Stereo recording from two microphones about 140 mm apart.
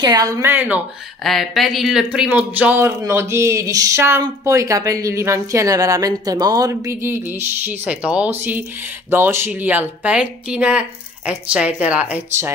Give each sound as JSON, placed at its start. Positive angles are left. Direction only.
{"t": 0.0, "sound": "speech", "side_deg": -25}
{"t": 1.2, "sound": "speech", "side_deg": 0}